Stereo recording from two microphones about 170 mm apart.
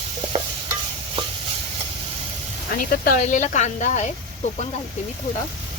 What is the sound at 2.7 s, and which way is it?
Speech, 55° left (ahead or behind).